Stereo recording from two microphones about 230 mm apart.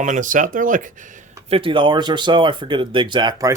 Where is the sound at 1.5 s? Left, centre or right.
Right.